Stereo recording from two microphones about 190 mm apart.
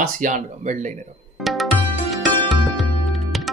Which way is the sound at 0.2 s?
40° right (ahead or behind).